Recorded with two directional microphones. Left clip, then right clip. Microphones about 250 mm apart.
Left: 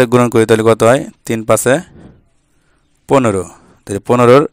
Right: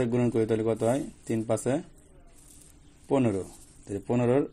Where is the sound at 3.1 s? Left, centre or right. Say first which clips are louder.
Left 15 dB; left.